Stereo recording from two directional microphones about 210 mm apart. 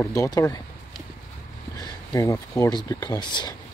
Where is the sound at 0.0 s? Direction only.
15° left (ahead or behind).